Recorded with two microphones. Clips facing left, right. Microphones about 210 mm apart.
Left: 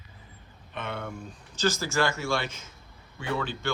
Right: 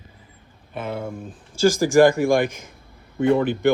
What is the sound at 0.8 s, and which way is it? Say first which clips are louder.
Speech: right 7 dB; 30° right (ahead or behind).